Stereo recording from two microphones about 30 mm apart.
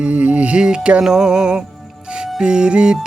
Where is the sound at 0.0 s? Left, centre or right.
Right.